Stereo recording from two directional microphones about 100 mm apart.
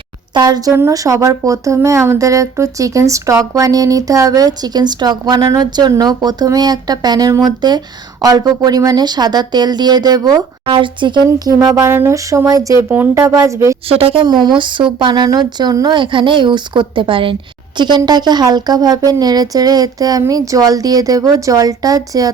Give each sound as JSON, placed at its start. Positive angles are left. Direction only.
{"t": 0.3, "sound": "speech", "side_deg": -40}
{"t": 10.7, "sound": "speech", "side_deg": -55}
{"t": 11.9, "sound": "speech", "side_deg": -25}
{"t": 13.8, "sound": "a woman's voice", "side_deg": -70}
{"t": 14.3, "sound": "speech", "side_deg": -45}
{"t": 16.0, "sound": "a woman's voice", "side_deg": -55}
{"t": 17.7, "sound": "speech", "side_deg": -50}